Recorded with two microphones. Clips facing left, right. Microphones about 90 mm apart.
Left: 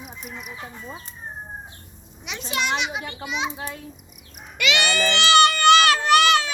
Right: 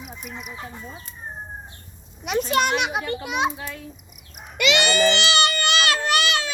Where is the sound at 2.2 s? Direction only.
50° right (ahead or behind).